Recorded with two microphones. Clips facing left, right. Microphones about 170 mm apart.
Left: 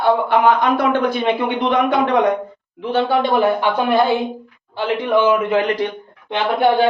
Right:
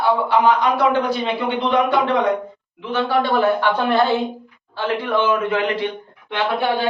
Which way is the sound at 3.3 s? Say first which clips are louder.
Left 1 dB; 15° left (ahead or behind).